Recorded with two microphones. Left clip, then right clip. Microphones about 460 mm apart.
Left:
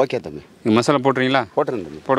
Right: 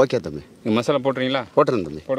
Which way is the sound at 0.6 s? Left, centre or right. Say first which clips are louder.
Left 4 dB; left.